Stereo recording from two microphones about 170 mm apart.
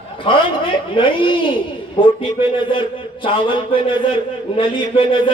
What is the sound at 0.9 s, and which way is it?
A man's voice, 30° left (ahead or behind).